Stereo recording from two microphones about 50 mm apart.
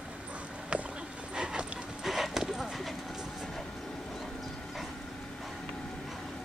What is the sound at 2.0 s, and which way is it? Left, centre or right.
Clip-clop, centre.